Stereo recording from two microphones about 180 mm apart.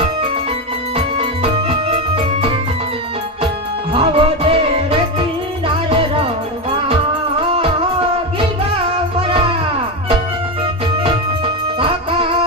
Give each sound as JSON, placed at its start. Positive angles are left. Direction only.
{"t": 0.9, "sound": "music", "side_deg": -30}
{"t": 3.9, "sound": "music", "side_deg": -30}
{"t": 7.5, "sound": "music", "side_deg": -30}
{"t": 10.9, "sound": "music", "side_deg": -30}